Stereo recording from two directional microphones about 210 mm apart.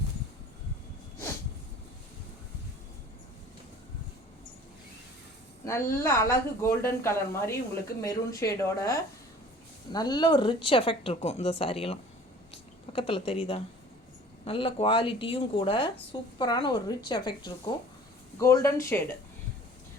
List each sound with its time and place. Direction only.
5.6 s a woman's voice: 10° left (ahead or behind)